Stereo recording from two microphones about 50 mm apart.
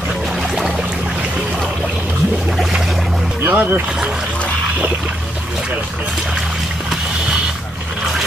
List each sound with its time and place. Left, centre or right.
3.4 s speech: right